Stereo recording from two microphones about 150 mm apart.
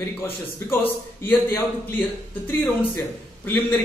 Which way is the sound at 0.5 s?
15° left (ahead or behind).